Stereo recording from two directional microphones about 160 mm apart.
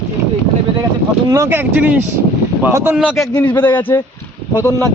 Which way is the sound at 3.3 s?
25° left (ahead or behind).